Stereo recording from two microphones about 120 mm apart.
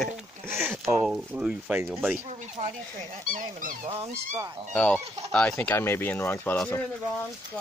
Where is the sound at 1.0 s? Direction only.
5° right (ahead or behind).